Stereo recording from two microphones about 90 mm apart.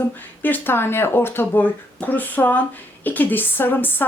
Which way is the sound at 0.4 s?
20° left (ahead or behind).